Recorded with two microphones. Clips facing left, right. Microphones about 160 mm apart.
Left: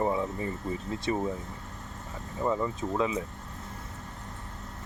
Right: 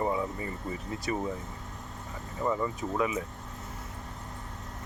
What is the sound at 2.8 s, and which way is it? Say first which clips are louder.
Speech: left 1 dB; 25° left (ahead or behind).